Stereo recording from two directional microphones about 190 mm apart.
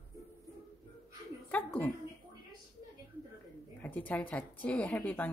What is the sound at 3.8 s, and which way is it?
Speech, 10° left (ahead or behind).